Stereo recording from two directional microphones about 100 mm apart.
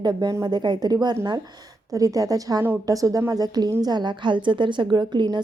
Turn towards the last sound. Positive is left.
turn(degrees=-45)  # may be behind; listen again after turning